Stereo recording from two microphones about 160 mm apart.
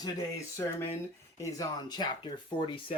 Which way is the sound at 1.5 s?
25° left (ahead or behind).